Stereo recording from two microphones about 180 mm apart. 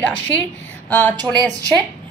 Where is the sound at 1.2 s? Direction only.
25° right (ahead or behind).